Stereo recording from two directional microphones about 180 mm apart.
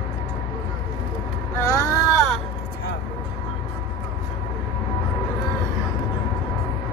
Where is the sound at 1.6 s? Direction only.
15° left (ahead or behind).